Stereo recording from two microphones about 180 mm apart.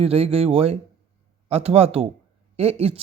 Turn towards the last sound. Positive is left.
turn(degrees=-35)  # may be behind; listen again after turning